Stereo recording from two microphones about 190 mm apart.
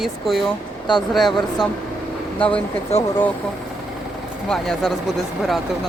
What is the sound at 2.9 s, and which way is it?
Speech, 35° left (ahead or behind).